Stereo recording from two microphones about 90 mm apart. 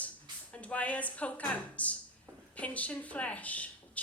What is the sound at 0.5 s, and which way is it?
A woman's voice, 15° left (ahead or behind).